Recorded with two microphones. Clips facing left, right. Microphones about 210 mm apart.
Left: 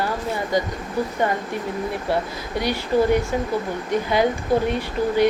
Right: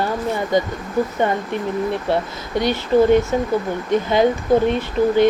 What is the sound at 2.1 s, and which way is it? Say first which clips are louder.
Speech: right 3 dB; 25° right (ahead or behind).